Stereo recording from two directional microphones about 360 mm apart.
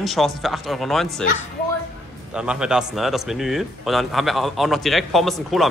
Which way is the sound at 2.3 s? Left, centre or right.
Centre.